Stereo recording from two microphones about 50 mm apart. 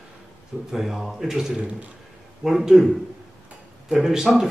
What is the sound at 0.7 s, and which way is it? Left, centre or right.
Speech, centre.